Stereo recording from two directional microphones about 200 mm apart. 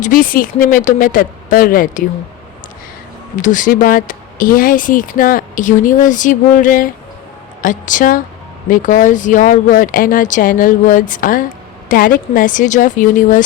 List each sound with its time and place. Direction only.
0.0 s speech: 45° left (ahead or behind)
3.4 s speech: 40° left (ahead or behind)